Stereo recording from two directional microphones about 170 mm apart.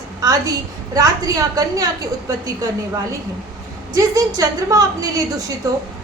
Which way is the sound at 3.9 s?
20° right (ahead or behind).